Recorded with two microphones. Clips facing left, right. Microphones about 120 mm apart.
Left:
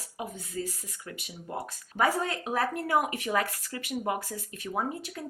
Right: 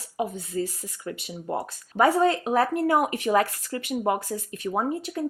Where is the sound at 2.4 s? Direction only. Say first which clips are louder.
Right 7 dB; 60° right (ahead or behind).